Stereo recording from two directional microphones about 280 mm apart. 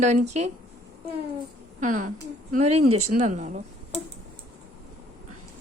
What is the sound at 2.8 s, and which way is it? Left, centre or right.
Speech, right.